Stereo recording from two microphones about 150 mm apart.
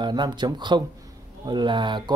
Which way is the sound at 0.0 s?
30° right (ahead or behind).